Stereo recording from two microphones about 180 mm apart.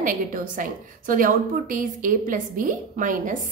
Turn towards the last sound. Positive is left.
turn(degrees=-45)  # may be behind; listen again after turning